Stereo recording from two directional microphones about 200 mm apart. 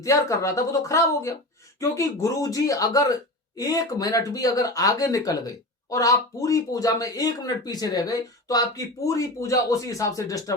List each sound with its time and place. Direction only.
0.0 s a woman's voice: 15° left (ahead or behind)